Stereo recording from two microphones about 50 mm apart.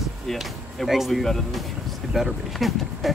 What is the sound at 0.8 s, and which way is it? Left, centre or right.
Speech, centre.